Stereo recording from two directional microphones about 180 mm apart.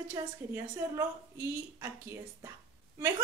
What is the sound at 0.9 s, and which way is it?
Speech, 15° right (ahead or behind).